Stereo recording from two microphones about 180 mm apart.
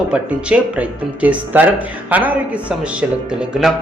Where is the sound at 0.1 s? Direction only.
5° right (ahead or behind).